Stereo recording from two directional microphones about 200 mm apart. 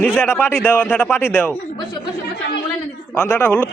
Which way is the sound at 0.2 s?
10° left (ahead or behind).